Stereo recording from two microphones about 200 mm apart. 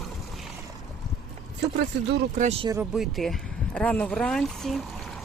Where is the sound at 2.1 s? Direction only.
55° right (ahead or behind).